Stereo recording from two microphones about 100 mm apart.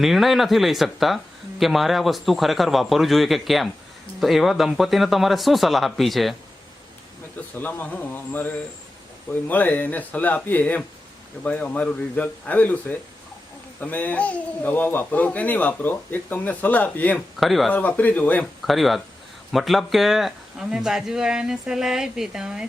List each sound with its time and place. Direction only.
0.0 s speech: centre (ahead or behind)
7.5 s speech: 15° left (ahead or behind)
17.4 s speech: centre (ahead or behind)
17.7 s speech: 15° left (ahead or behind)
18.6 s speech: centre (ahead or behind)